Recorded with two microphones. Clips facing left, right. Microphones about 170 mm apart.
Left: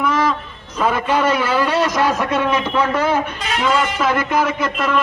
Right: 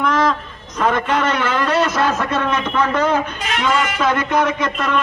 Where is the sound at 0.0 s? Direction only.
5° left (ahead or behind).